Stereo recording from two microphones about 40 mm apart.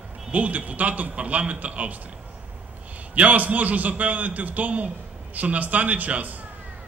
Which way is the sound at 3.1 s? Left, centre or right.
Right.